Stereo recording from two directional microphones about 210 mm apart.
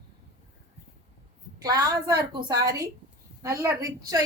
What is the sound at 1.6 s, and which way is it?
A woman's voice, 15° right (ahead or behind).